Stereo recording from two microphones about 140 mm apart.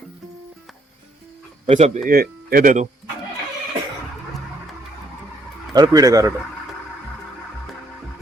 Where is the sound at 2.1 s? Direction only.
90° right; by 2.8 s 70° right (ahead or behind).